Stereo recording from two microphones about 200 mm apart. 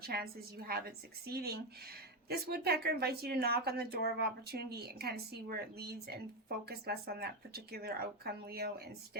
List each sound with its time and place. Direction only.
0.0 s speech: 50° right (ahead or behind)